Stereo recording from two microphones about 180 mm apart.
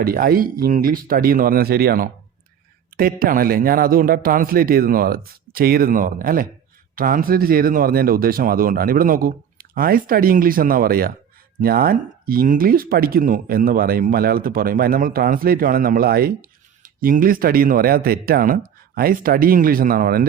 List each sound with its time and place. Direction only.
0.0 s speech: 55° right (ahead or behind)